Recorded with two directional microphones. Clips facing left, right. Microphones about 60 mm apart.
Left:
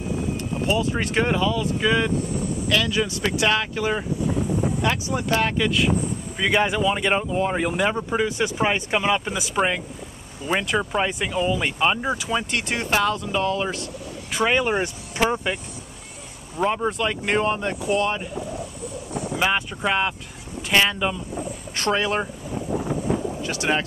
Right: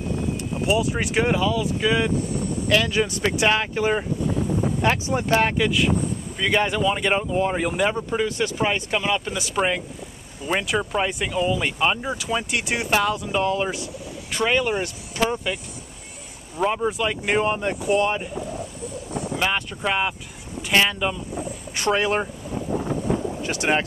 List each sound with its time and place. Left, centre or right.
0.7 s speech: centre
2.7 s speech: right
4.8 s speech: right
5.6 s speech: centre
6.3 s speech: centre
8.1 s speech: centre
9.4 s speech: centre
14.3 s speech: centre
16.5 s speech: centre; by 18.2 s right
19.3 s speech: centre
21.7 s speech: centre
23.4 s speech: right